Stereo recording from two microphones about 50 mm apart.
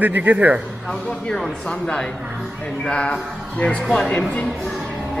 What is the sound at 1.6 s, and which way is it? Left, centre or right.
Speech, left.